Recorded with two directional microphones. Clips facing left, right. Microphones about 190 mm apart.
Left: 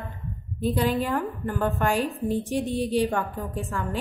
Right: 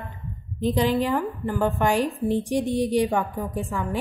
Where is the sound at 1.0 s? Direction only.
10° right (ahead or behind).